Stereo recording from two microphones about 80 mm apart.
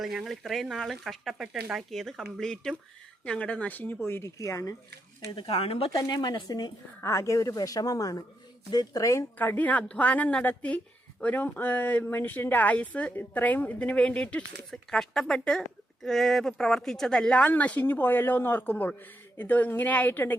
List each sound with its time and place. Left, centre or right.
0.0 s speech: centre; by 4.7 s left
5.4 s speech: left
6.1 s speech: left
7.0 s a woman's voice: left
9.4 s a woman's voice: left